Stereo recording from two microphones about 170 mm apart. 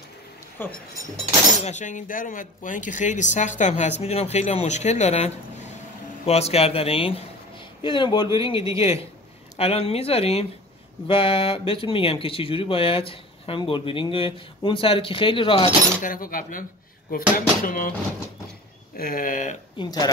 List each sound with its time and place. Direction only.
0.6 s speech: 10° left (ahead or behind)
1.6 s speech: 45° left (ahead or behind)
16.0 s speech: 55° left (ahead or behind)
18.9 s speech: 55° left (ahead or behind)
19.8 s speech: 25° left (ahead or behind)